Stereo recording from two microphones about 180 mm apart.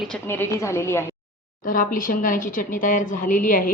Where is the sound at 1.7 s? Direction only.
50° left (ahead or behind).